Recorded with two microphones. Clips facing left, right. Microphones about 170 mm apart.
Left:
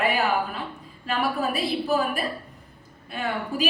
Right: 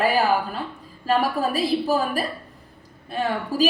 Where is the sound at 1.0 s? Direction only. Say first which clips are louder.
Right 4 dB; 35° right (ahead or behind).